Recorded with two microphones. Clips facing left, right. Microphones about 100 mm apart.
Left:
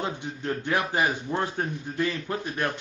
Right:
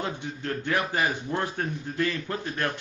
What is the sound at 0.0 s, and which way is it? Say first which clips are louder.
A man's voice: left 1 dB; 20° left (ahead or behind).